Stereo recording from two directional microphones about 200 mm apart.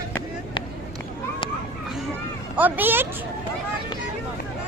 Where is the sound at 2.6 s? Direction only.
10° right (ahead or behind).